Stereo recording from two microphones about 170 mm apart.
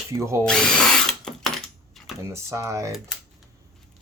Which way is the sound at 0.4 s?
5° left (ahead or behind).